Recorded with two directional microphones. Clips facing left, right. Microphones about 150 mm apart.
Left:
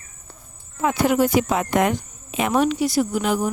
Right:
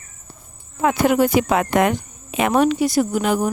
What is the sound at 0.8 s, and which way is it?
Speech, 60° right (ahead or behind).